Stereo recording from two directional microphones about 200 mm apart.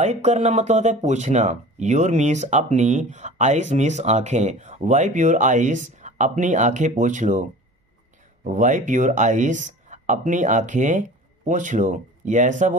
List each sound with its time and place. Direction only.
0.0 s speech: 35° right (ahead or behind)
8.5 s speech: 40° right (ahead or behind)